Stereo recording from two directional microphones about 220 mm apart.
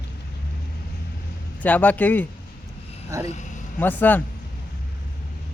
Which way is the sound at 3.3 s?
35° left (ahead or behind).